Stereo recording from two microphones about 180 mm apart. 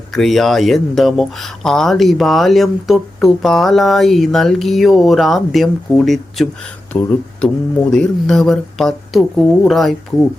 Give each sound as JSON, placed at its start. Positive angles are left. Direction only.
{"t": 0.1, "sound": "speech", "side_deg": 0}
{"t": 6.9, "sound": "speech", "side_deg": 10}